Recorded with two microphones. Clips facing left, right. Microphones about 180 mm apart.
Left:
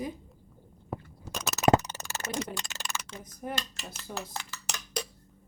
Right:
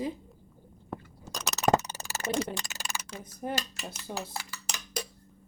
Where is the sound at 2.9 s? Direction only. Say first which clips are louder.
Even; 30° right (ahead or behind).